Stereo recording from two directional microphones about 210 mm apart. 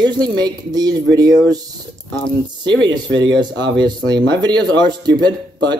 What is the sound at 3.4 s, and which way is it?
Speech, 20° right (ahead or behind).